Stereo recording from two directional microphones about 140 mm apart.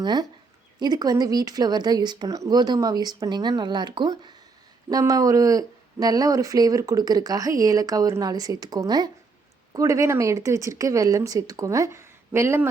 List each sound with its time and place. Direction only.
0.0 s speech: 30° right (ahead or behind)